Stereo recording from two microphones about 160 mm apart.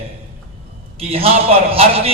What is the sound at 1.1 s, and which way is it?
A man's voice, 35° right (ahead or behind).